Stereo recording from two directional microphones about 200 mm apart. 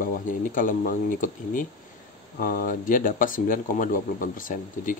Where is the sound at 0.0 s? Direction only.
45° left (ahead or behind).